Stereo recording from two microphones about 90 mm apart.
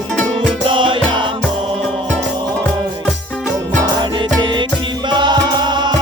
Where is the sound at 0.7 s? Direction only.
70° right (ahead or behind).